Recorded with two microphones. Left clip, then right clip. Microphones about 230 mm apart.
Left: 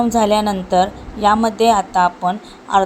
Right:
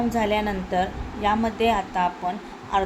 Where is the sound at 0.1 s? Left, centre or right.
Left.